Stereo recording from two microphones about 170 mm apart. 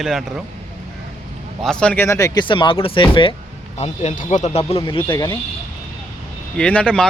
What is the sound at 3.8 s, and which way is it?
Speech, 40° left (ahead or behind).